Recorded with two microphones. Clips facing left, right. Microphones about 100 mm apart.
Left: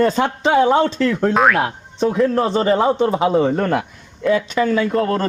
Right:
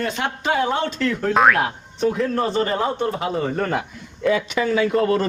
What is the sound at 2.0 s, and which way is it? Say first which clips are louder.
A man's voice: left 4 dB; 25° left (ahead or behind).